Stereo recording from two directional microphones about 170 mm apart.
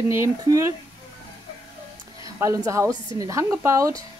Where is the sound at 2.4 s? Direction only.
20° right (ahead or behind).